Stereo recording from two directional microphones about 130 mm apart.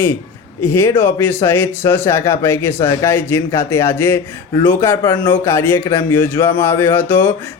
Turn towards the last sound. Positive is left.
turn(degrees=15)  # may be behind; listen again after turning